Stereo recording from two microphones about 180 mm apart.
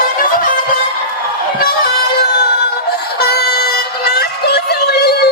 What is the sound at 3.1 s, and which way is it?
Synthetic singing, 60° left (ahead or behind).